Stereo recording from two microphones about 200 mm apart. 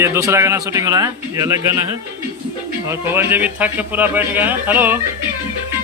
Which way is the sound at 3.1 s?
10° right (ahead or behind).